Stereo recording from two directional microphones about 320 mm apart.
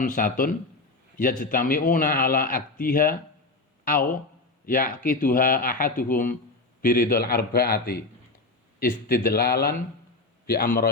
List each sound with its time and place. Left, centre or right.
0.0 s a man's voice: left
4.6 s a man's voice: left